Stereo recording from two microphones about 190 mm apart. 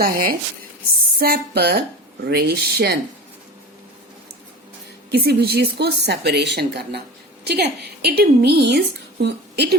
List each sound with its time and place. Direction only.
0.0 s a woman's voice: 50° right (ahead or behind)
5.1 s a woman's voice: 55° right (ahead or behind)